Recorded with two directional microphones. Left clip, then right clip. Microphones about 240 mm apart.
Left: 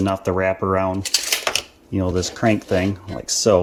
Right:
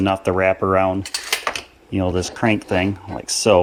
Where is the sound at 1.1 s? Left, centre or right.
Left.